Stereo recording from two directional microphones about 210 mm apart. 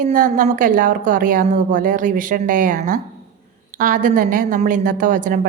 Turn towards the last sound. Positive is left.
turn(degrees=-40)  # may be behind; listen again after turning